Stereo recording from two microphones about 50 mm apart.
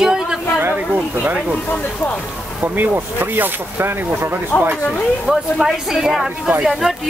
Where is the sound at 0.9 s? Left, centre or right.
Right.